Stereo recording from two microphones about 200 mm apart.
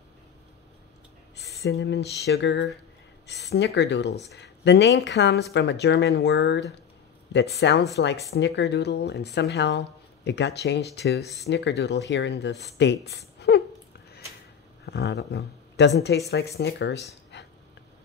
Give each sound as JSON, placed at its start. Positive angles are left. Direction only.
{"t": 1.6, "sound": "speech", "side_deg": 55}
{"t": 7.6, "sound": "a woman's voice", "side_deg": 60}
{"t": 14.9, "sound": "speech", "side_deg": 55}